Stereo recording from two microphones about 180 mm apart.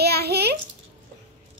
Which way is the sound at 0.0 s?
65° right (ahead or behind).